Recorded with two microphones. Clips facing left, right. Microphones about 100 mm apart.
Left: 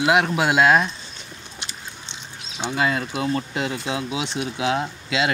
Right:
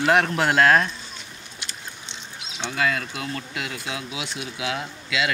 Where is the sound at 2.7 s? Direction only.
25° left (ahead or behind).